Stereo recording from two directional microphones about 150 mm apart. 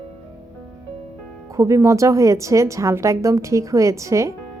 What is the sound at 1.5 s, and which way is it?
A woman's voice, 20° right (ahead or behind).